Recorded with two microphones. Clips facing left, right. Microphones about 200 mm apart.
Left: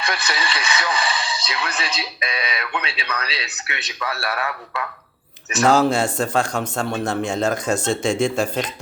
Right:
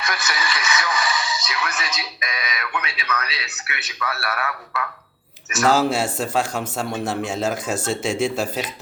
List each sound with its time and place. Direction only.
0.0 s a man's voice: 30° left (ahead or behind)
5.6 s a man's voice: 5° right (ahead or behind)